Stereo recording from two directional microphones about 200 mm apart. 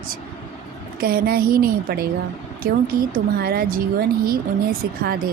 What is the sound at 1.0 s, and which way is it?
A woman's voice, 50° right (ahead or behind).